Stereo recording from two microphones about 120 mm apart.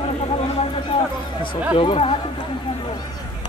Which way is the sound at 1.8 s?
45° left (ahead or behind).